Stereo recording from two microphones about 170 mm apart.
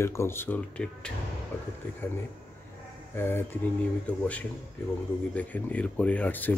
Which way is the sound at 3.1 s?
15° left (ahead or behind).